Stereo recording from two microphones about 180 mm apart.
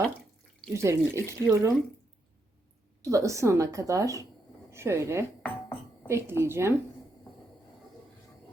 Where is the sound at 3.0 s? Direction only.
15° right (ahead or behind).